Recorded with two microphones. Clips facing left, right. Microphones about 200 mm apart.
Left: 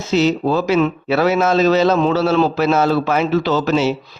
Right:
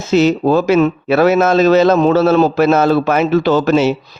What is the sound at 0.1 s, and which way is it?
A man's voice, 50° right (ahead or behind).